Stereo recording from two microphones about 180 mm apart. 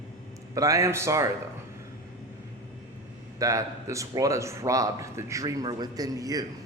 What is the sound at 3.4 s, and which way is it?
Speech, 20° right (ahead or behind).